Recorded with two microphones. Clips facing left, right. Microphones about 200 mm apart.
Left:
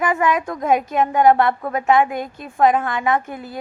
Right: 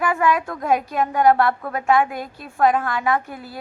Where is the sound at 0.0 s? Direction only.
20° left (ahead or behind).